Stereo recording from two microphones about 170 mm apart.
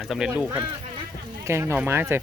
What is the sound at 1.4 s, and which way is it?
Speech, 15° right (ahead or behind).